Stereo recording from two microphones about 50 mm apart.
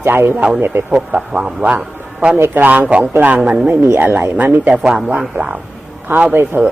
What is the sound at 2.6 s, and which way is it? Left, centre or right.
Speech, right.